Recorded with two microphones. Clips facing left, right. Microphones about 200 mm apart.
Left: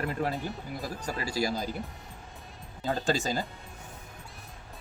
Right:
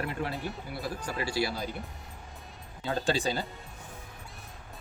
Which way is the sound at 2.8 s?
45° left (ahead or behind).